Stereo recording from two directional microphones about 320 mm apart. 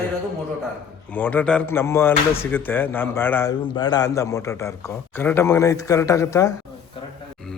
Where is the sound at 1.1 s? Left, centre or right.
Centre.